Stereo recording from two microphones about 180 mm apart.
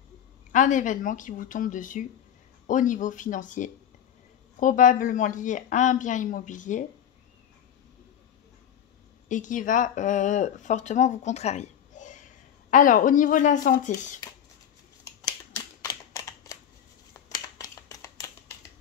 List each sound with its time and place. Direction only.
0.5 s a woman's voice: 45° left (ahead or behind)
9.3 s speech: 45° left (ahead or behind)
15.2 s a sound: 15° left (ahead or behind)